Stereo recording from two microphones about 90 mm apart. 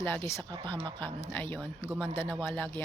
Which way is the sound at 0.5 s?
65° right (ahead or behind).